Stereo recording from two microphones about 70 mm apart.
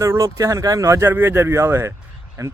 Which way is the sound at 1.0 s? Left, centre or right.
Right.